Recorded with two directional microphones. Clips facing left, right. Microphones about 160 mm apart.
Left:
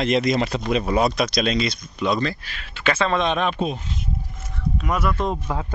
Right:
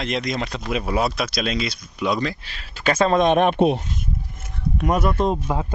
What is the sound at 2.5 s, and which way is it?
Speech, 40° right (ahead or behind).